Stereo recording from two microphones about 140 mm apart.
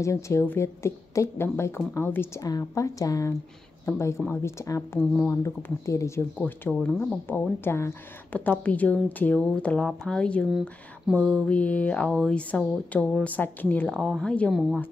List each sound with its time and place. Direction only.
0.0 s a woman's voice: 20° left (ahead or behind)
5.0 s speech: 5° left (ahead or behind)
5.3 s speech: 20° left (ahead or behind); by 14.8 s centre (ahead or behind)